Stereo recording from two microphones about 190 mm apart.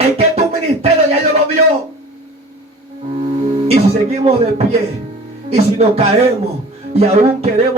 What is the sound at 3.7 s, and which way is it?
Speech, 30° right (ahead or behind).